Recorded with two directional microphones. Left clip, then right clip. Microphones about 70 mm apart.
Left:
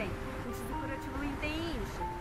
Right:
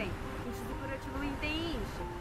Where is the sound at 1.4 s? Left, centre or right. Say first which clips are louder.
Right 1 dB; centre.